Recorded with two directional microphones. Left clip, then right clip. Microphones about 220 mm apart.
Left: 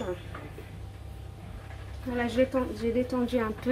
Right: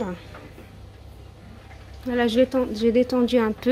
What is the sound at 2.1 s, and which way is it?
Speech, 45° right (ahead or behind).